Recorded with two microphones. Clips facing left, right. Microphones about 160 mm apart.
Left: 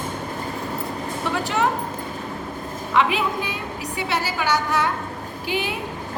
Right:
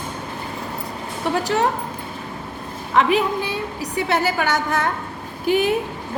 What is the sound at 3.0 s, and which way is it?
Speech, 40° right (ahead or behind).